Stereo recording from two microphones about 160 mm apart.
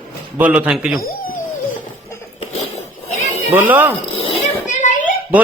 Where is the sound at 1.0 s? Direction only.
60° left (ahead or behind).